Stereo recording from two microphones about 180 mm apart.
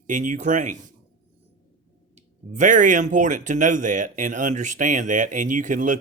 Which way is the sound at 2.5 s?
45° right (ahead or behind).